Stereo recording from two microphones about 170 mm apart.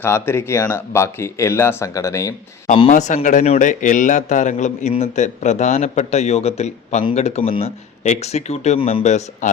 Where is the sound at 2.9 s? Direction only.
45° left (ahead or behind).